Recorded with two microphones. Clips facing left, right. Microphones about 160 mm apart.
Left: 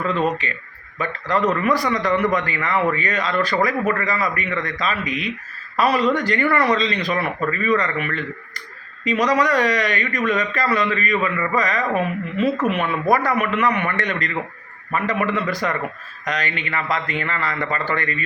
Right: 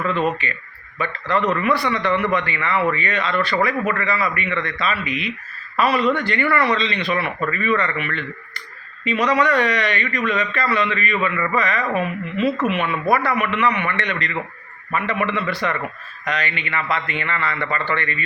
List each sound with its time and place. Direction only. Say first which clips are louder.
0.0 s speech: even; 40° left (ahead or behind)